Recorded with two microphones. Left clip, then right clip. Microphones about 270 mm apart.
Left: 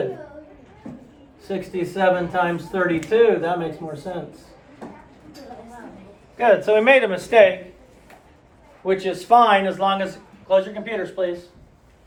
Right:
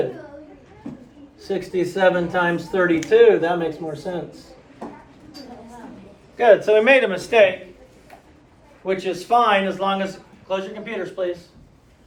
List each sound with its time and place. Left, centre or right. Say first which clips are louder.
1.5 s speech: right 3 dB; centre
6.3 s speech: right 2 dB; centre; by 7.5 s left
8.8 s speech: left 2 dB; left